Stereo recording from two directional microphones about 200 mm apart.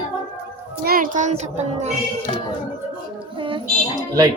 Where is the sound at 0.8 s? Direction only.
45° right (ahead or behind).